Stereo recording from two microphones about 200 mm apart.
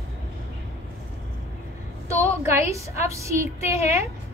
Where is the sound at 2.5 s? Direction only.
15° right (ahead or behind).